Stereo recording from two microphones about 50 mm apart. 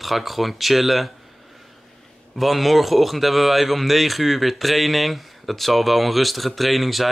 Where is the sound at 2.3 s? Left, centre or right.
Centre.